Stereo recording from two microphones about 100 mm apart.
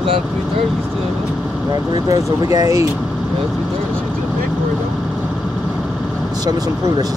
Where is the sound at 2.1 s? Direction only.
35° right (ahead or behind).